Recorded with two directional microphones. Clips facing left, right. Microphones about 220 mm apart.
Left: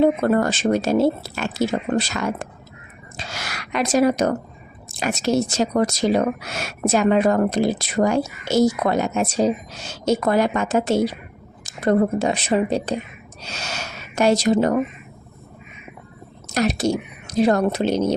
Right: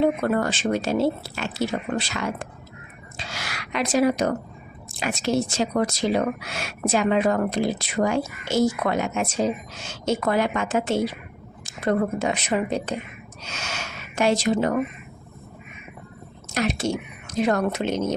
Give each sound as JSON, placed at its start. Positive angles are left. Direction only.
{"t": 0.0, "sound": "speech", "side_deg": 40}
{"t": 3.2, "sound": "a sound", "side_deg": 45}
{"t": 4.9, "sound": "speech", "side_deg": 40}
{"t": 16.5, "sound": "speech", "side_deg": 40}